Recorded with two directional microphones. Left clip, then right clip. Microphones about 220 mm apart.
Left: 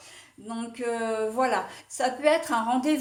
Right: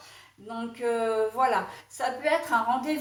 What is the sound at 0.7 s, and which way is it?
Speech, 45° left (ahead or behind).